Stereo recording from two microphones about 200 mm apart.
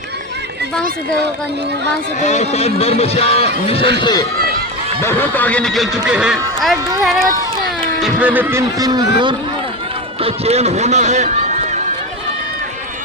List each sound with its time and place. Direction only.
2.2 s speech: 35° left (ahead or behind); by 9.0 s 20° right (ahead or behind)
10.2 s speech: 30° right (ahead or behind)